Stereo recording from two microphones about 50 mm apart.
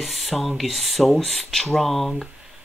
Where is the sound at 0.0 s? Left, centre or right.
Centre.